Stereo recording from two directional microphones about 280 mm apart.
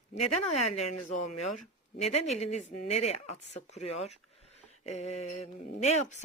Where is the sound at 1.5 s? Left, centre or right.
Left.